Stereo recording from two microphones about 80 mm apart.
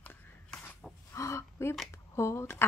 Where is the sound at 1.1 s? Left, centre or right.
Left.